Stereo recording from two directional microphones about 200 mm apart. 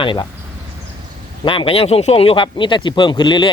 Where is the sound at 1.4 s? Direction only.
25° left (ahead or behind).